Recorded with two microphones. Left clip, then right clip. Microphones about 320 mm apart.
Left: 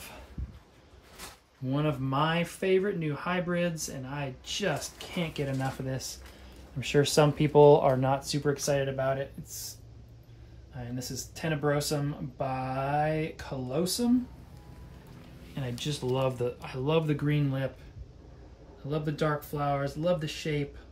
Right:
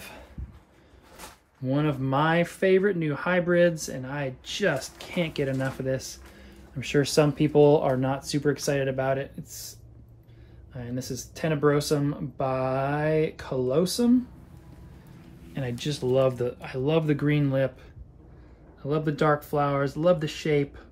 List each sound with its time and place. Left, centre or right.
1.7 s speech: centre
10.8 s speech: centre
15.5 s speech: centre
18.9 s speech: centre